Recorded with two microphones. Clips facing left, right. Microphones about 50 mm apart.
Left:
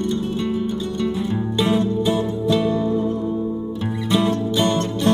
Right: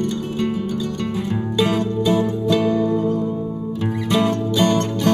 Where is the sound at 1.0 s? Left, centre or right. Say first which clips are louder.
Left 1 dB; right.